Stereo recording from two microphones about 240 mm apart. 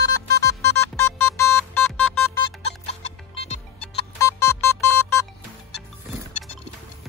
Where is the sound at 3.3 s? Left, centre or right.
Left.